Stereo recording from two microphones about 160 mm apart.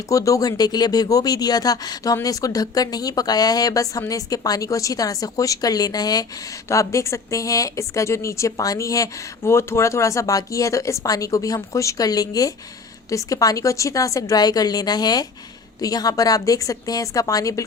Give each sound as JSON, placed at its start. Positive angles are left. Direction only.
{"t": 0.1, "sound": "speech", "side_deg": 20}